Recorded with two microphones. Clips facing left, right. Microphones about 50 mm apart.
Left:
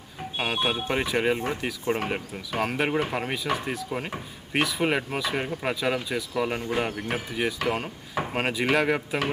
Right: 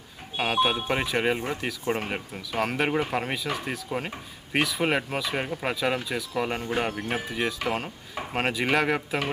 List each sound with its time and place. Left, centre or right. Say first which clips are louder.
0.3 s speech: right 3 dB; centre